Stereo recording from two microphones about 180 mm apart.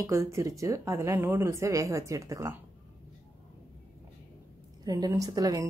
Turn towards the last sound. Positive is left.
turn(degrees=-20)  # may be behind; listen again after turning